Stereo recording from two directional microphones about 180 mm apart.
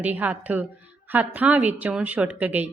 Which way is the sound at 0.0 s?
10° right (ahead or behind).